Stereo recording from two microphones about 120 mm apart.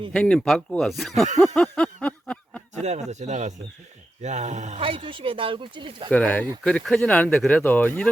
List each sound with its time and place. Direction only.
0.1 s speech: 5° left (ahead or behind)
1.5 s a sound: 10° left (ahead or behind)
2.8 s speech: 70° right (ahead or behind)
4.8 s speech: 50° right (ahead or behind)
6.1 s speech: 15° left (ahead or behind)